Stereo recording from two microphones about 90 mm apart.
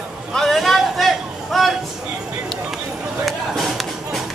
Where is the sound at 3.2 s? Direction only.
Centre (ahead or behind).